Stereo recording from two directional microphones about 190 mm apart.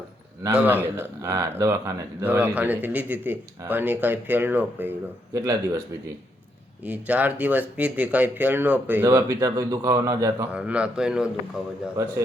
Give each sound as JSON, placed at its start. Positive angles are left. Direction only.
{"t": 0.4, "sound": "speech", "side_deg": -10}
{"t": 6.8, "sound": "a man's voice", "side_deg": -10}
{"t": 12.0, "sound": "speech", "side_deg": -15}